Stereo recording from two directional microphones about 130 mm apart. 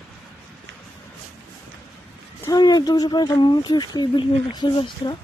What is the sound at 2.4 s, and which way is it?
Speech, 30° left (ahead or behind).